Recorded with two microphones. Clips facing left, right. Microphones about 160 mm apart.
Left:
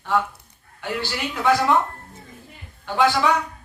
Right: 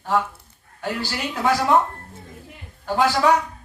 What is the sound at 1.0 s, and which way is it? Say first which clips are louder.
Speech: even; 40° right (ahead or behind).